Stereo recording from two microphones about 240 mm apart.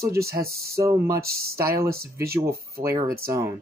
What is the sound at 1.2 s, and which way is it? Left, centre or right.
Speech, right.